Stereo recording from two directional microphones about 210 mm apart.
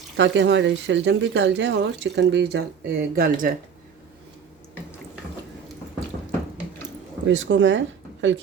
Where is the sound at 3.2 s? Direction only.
40° right (ahead or behind).